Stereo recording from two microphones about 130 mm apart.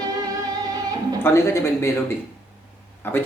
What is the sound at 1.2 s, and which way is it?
Speech, 20° left (ahead or behind).